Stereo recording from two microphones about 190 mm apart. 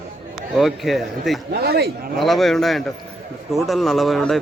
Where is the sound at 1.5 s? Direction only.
60° right (ahead or behind).